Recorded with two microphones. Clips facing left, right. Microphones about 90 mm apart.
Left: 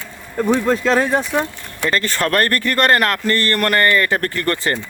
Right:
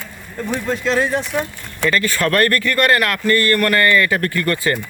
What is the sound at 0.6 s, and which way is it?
Speech, 50° left (ahead or behind).